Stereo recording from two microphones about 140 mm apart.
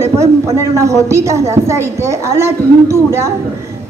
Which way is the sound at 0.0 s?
20° right (ahead or behind).